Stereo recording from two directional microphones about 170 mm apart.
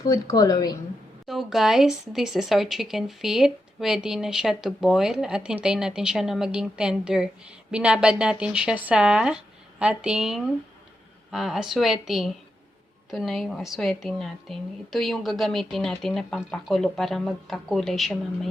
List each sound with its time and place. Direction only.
0.0 s a woman's voice: 20° left (ahead or behind)
1.3 s speech: centre (ahead or behind)